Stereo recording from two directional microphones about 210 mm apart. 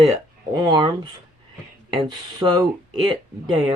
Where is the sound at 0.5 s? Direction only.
20° right (ahead or behind).